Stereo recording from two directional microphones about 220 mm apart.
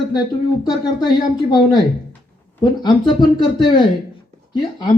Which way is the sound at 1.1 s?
20° left (ahead or behind).